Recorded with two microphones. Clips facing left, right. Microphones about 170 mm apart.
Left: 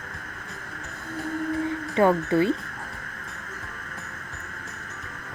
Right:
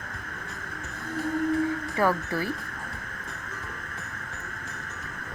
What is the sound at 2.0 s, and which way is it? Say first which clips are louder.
Speech: left 7 dB; 20° left (ahead or behind).